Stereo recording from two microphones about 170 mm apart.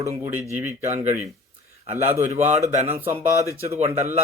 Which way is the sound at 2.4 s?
40° right (ahead or behind).